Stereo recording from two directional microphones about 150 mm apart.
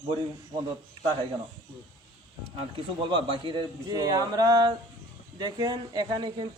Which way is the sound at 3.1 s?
35° right (ahead or behind).